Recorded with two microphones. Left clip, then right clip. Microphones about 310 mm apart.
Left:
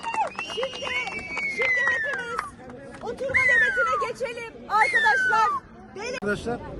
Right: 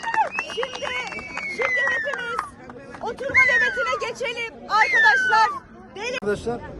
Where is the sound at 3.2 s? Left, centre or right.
Right.